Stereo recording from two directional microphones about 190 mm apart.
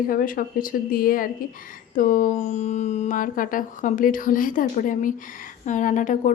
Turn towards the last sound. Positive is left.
turn(degrees=40)  # may be behind; listen again after turning